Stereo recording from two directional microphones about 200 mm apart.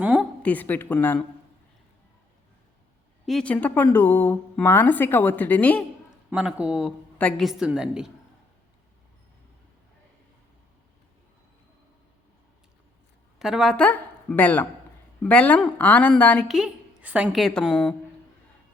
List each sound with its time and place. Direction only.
0.0 s a sound: 5° right (ahead or behind)
0.4 s a woman's voice: 10° left (ahead or behind)
3.2 s a woman's voice: 5° left (ahead or behind)
6.3 s a woman's voice: 5° right (ahead or behind)
13.4 s a woman's voice: centre (ahead or behind)